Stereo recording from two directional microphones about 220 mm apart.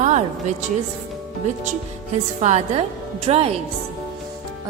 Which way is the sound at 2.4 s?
30° right (ahead or behind).